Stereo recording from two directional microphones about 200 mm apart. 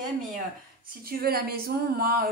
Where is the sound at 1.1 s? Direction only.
50° right (ahead or behind).